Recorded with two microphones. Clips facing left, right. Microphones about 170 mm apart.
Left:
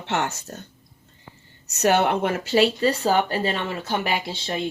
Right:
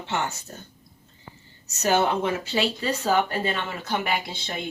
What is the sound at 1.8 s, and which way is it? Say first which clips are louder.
Speech: left 2 dB; 60° left (ahead or behind).